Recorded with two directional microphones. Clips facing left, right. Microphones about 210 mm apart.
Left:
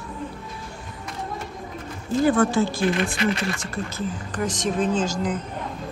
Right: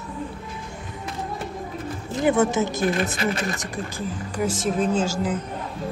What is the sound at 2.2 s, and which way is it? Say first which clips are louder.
Speech: left 1 dB; 20° right (ahead or behind).